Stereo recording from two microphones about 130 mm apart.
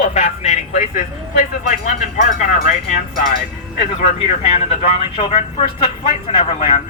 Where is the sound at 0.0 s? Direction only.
60° left (ahead or behind); by 3.0 s 75° left (ahead or behind).